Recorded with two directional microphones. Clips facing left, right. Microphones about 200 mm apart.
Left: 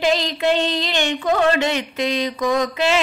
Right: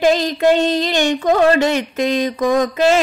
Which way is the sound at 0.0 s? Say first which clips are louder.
Right 5 dB; 45° right (ahead or behind).